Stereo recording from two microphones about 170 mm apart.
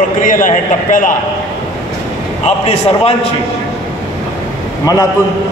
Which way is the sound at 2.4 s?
40° left (ahead or behind).